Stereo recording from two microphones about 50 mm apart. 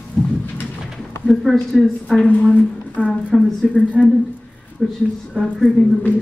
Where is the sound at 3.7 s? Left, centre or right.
Right.